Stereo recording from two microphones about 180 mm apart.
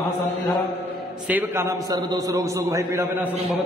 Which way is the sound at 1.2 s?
10° right (ahead or behind).